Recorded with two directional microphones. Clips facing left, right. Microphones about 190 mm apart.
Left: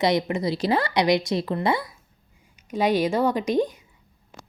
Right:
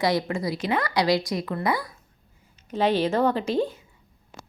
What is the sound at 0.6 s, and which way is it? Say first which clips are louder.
Speech: left 4 dB; 35° left (ahead or behind).